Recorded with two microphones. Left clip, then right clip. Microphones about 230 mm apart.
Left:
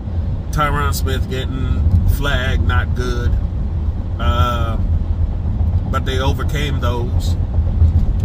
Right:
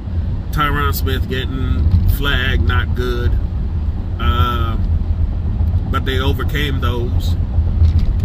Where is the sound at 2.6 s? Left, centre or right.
Left.